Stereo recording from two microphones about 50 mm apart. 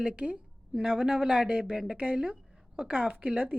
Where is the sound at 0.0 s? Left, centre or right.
Right.